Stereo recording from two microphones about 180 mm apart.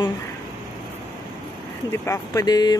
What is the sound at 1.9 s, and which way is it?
Speech, 15° left (ahead or behind).